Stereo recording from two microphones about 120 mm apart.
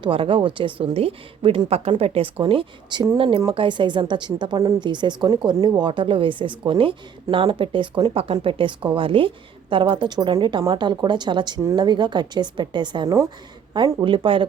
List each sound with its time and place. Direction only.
0.0 s a woman's voice: 45° right (ahead or behind)